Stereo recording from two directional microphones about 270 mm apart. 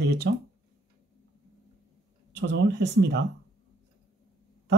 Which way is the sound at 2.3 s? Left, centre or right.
Right.